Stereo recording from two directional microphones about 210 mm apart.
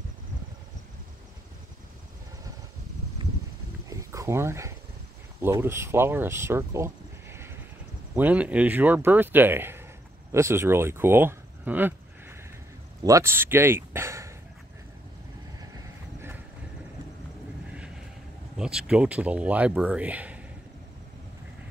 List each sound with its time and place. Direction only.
3.9 s a sound: 15° right (ahead or behind)
5.4 s speech: 10° right (ahead or behind)
15.7 s vehicle: 10° right (ahead or behind)
18.6 s speech: 5° right (ahead or behind)